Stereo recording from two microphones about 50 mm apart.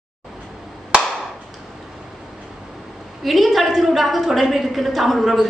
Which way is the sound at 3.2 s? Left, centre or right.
Centre.